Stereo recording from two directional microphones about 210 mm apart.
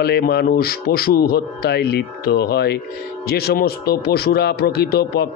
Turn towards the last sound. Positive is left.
turn(degrees=50)  # may be behind; listen again after turning